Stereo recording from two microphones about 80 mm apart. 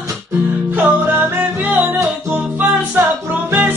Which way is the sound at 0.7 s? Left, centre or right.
Right.